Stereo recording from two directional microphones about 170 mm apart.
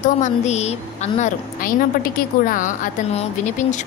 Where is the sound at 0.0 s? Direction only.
45° left (ahead or behind).